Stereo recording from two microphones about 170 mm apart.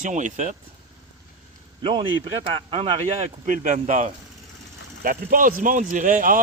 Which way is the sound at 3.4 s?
50° right (ahead or behind).